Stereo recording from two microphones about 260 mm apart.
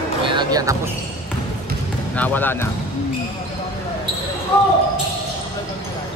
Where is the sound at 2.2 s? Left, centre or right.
Centre.